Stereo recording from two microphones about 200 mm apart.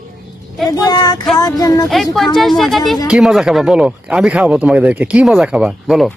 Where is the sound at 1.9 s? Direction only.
Centre (ahead or behind).